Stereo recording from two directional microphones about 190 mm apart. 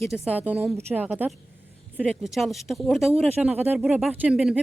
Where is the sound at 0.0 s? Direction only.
5° right (ahead or behind).